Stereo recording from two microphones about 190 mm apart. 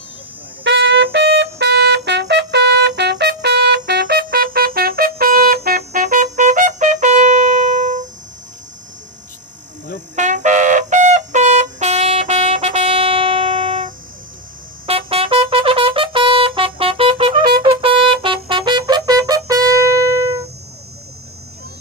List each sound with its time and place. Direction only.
0.6 s trumpet: 70° right (ahead or behind); by 8.0 s 40° right (ahead or behind)
10.2 s trumpet: 40° right (ahead or behind)
14.8 s trumpet: 30° right (ahead or behind)
17.7 s brass instrument: 30° right (ahead or behind)